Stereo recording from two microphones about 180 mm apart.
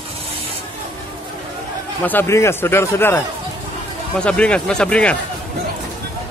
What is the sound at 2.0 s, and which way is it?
A man's voice, 10° left (ahead or behind).